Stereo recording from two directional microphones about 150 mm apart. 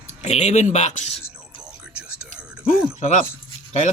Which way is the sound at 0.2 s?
45° left (ahead or behind).